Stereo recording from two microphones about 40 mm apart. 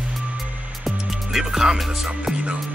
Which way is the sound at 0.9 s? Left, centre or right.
Centre.